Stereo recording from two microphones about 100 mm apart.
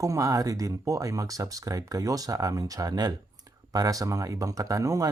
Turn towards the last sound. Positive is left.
turn(degrees=-35)  # may be behind; listen again after turning